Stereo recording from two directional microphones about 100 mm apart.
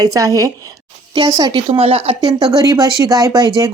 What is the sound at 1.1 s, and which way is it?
A woman's voice, 50° right (ahead or behind).